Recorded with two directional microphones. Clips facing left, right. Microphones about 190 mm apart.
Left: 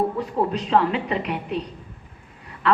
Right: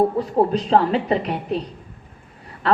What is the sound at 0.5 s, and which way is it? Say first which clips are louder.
Speech: right 3 dB; 35° right (ahead or behind).